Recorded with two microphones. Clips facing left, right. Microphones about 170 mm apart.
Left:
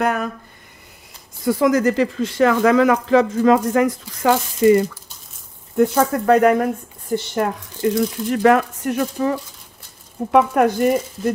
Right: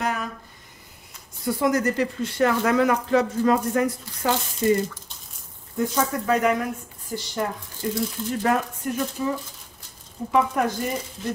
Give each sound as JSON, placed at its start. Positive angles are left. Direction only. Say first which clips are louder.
{"t": 0.0, "sound": "speech", "louder": "left 7 dB", "side_deg": 55}
{"t": 1.4, "sound": "speech", "louder": "left 6 dB", "side_deg": 90}
{"t": 5.8, "sound": "speech", "louder": "left 8 dB", "side_deg": 55}
{"t": 7.2, "sound": "speech", "louder": "left 6 dB", "side_deg": 65}